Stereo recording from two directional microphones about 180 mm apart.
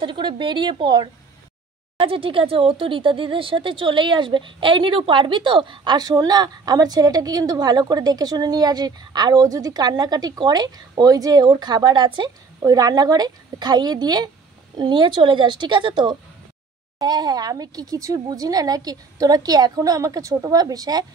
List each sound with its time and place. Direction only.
0.0 s speech: 25° right (ahead or behind)